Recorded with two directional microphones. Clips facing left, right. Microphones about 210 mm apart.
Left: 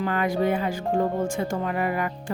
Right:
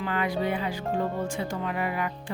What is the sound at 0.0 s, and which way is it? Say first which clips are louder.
Speech: left 4 dB; 45° left (ahead or behind).